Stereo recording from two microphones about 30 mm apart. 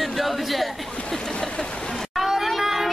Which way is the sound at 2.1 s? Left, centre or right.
Centre.